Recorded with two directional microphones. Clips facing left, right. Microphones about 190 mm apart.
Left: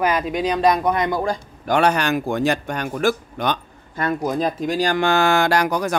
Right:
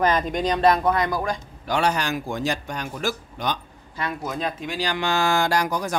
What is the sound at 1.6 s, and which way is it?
A man's voice, 55° left (ahead or behind).